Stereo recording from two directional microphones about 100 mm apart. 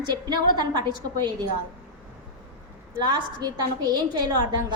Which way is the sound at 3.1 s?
45° right (ahead or behind).